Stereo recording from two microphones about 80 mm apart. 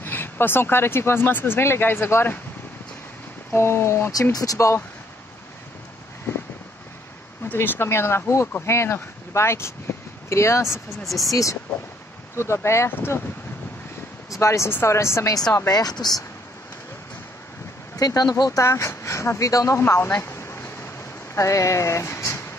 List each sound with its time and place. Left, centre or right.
0.0 s speech: left
3.5 s speech: left
4.1 s speech: left
7.5 s speech: left
10.9 s speech: centre
12.4 s speech: left
14.3 s speech: left
15.7 s speech: left
17.9 s speech: left
18.4 s speech: left
19.8 s speech: left
20.2 s a sound: left
21.4 s speech: left